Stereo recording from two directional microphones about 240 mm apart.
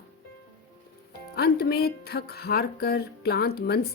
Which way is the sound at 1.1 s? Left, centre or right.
Left.